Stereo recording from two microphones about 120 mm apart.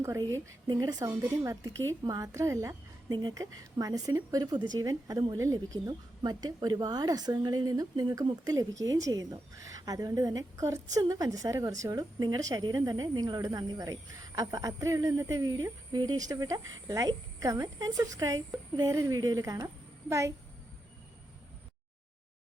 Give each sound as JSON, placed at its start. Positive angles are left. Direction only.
{"t": 0.0, "sound": "a woman's voice", "side_deg": -25}
{"t": 3.1, "sound": "a woman's voice", "side_deg": -35}